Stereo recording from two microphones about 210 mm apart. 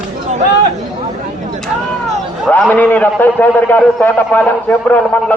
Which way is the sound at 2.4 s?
5° left (ahead or behind).